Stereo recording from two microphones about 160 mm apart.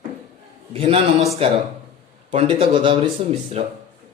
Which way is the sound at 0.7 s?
35° right (ahead or behind).